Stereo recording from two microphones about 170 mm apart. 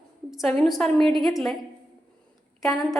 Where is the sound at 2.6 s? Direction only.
Centre (ahead or behind).